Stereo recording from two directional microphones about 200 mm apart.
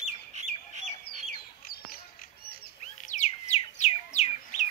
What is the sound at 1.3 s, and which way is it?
Bird, 50° left (ahead or behind).